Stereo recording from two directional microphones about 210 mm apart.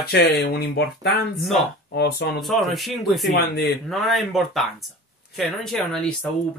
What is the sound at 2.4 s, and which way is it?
Speech, centre (ahead or behind).